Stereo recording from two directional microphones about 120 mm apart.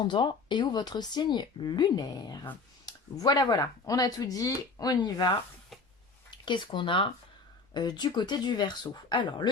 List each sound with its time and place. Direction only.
0.1 s speech: 40° left (ahead or behind)
6.3 s speech: 40° left (ahead or behind)